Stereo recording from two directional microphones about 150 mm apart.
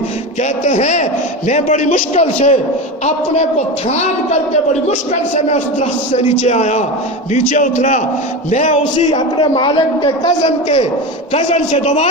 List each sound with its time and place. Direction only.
0.6 s a man's voice: 50° left (ahead or behind)
3.8 s a man's voice: 50° left (ahead or behind)
9.1 s a man's voice: 35° left (ahead or behind)
11.3 s a man's voice: 50° left (ahead or behind)